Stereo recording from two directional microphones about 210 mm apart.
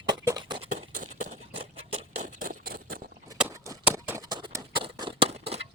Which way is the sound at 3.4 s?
10° right (ahead or behind).